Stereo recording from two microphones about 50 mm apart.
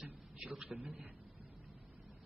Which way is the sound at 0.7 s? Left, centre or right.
Right.